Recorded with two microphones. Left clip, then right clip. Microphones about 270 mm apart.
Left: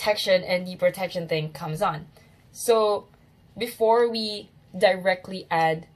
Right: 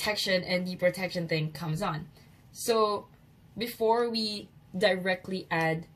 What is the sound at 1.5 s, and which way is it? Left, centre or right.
Speech, centre.